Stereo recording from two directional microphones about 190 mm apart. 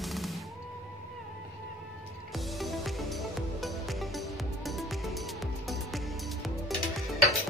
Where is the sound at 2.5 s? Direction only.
Centre (ahead or behind).